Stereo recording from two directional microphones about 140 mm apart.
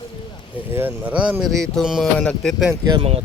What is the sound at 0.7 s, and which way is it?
Speech, 15° right (ahead or behind).